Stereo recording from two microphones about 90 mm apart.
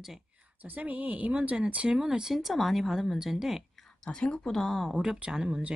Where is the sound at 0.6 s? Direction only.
20° right (ahead or behind); by 4.9 s 5° left (ahead or behind).